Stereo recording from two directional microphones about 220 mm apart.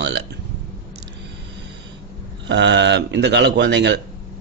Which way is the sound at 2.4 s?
55° right (ahead or behind).